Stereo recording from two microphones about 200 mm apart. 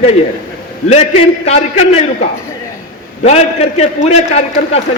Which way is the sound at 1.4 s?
30° left (ahead or behind).